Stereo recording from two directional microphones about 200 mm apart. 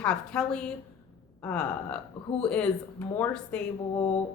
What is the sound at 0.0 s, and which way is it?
A woman's voice, 5° left (ahead or behind).